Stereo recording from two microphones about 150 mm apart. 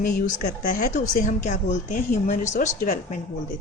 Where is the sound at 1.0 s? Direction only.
55° left (ahead or behind).